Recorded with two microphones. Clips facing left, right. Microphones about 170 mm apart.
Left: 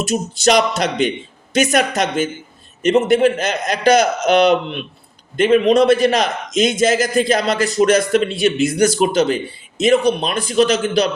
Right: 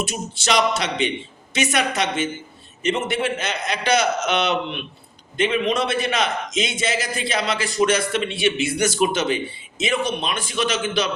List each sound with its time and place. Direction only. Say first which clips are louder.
0.0 s a man's voice: left 9 dB; 40° left (ahead or behind)